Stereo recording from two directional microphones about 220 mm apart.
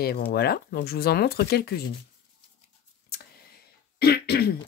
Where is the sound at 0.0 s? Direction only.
45° left (ahead or behind).